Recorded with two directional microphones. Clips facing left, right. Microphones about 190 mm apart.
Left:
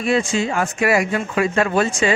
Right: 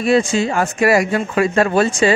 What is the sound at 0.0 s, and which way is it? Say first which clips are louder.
A man's voice: right 4 dB; 35° right (ahead or behind).